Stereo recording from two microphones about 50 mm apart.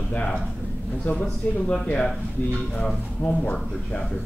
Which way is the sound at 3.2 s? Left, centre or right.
Left.